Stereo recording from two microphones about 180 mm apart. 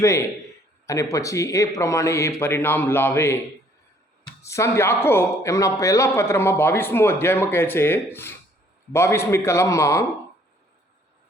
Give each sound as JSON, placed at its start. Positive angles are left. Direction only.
{"t": 0.0, "sound": "a man's voice", "side_deg": 15}
{"t": 4.4, "sound": "a man's voice", "side_deg": 15}